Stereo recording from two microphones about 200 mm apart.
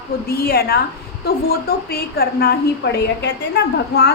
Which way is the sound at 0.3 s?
50° left (ahead or behind).